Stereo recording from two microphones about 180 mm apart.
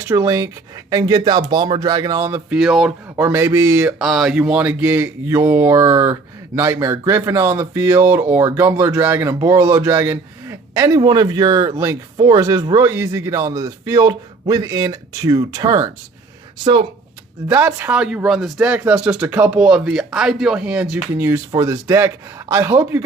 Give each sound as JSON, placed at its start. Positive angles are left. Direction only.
{"t": 0.1, "sound": "speech", "side_deg": -15}
{"t": 2.5, "sound": "speech", "side_deg": -5}
{"t": 3.2, "sound": "speech", "side_deg": -15}
{"t": 3.9, "sound": "speech", "side_deg": 0}
{"t": 17.5, "sound": "speech", "side_deg": -10}